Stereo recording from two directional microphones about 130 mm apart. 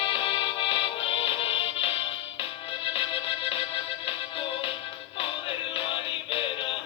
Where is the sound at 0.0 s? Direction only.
40° left (ahead or behind).